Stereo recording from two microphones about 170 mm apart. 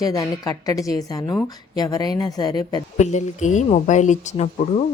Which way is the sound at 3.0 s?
45° left (ahead or behind).